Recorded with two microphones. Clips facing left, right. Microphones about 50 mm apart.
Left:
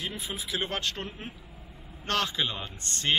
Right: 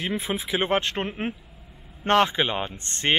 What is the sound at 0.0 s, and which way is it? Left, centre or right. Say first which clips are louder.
Speech: right 8 dB; right.